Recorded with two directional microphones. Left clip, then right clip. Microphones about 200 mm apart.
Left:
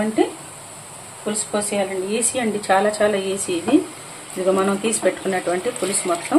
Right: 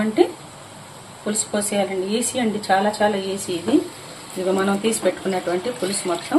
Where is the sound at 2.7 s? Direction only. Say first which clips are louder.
Left 2 dB; 15° left (ahead or behind).